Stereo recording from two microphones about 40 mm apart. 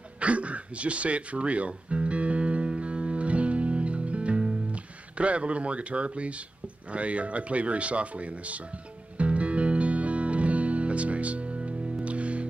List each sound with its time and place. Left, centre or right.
0.2 s music: right
5.1 s speech: right
9.2 s music: right